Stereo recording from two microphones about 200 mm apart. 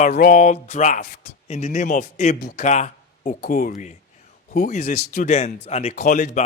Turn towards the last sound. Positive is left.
turn(degrees=40)  # may be behind; listen again after turning